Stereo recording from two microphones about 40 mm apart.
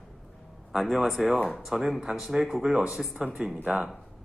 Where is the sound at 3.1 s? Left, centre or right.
Right.